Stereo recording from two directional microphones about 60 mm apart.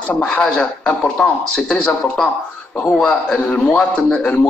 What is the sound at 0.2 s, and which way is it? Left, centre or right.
A man's voice, centre.